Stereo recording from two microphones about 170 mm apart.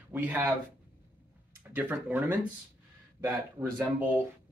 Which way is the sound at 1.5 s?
10° right (ahead or behind).